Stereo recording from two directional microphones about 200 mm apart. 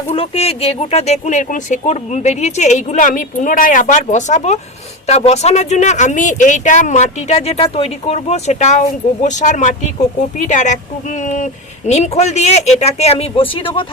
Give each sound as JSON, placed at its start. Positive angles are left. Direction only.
{"t": 0.1, "sound": "speech", "side_deg": 30}